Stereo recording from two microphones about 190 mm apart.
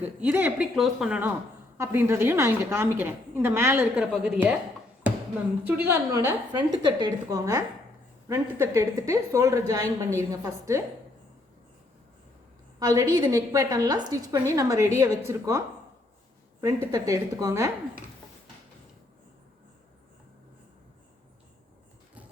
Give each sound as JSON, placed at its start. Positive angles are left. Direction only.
{"t": 0.0, "sound": "a woman's voice", "side_deg": -10}
{"t": 5.6, "sound": "a woman's voice", "side_deg": -10}
{"t": 12.8, "sound": "a woman's voice", "side_deg": -20}